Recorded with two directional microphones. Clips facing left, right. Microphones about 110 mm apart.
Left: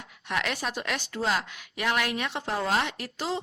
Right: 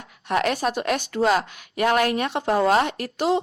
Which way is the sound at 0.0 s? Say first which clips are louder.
Right 8 dB; 45° right (ahead or behind).